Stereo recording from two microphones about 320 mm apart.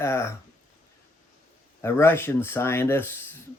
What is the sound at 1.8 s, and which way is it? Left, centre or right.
Speech, centre.